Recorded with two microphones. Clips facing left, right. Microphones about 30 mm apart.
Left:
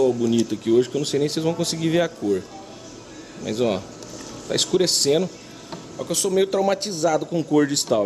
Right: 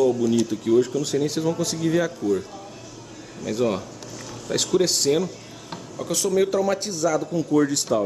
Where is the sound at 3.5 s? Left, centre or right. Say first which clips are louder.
Left 1 dB; centre.